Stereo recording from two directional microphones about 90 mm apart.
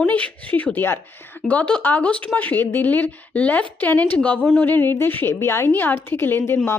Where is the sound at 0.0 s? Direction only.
15° left (ahead or behind).